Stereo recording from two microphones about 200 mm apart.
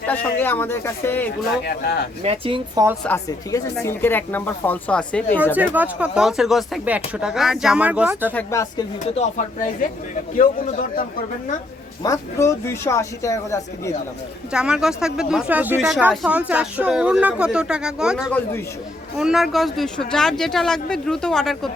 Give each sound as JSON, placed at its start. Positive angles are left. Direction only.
{"t": 0.1, "sound": "speech", "side_deg": 10}
{"t": 2.2, "sound": "speech", "side_deg": -30}
{"t": 3.0, "sound": "speech", "side_deg": 5}
{"t": 3.5, "sound": "speech", "side_deg": 15}
{"t": 5.5, "sound": "speech", "side_deg": -10}
{"t": 8.3, "sound": "speech", "side_deg": 10}
{"t": 10.3, "sound": "a man's voice", "side_deg": 40}
{"t": 12.0, "sound": "speech", "side_deg": 15}
{"t": 14.5, "sound": "speech", "side_deg": -5}